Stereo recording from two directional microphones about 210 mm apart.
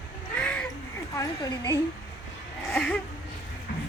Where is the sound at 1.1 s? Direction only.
15° left (ahead or behind).